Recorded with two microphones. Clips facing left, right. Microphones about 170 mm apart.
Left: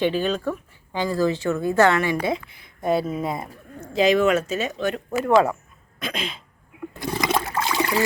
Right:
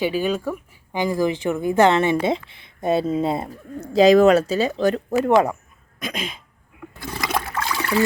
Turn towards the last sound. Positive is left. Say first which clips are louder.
# left 1 dB
turn(degrees=20)  # may be behind; listen again after turning